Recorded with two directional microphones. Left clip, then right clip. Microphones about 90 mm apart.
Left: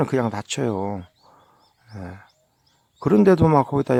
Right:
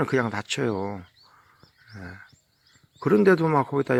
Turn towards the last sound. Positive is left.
turn(degrees=45)  # may be behind; listen again after turning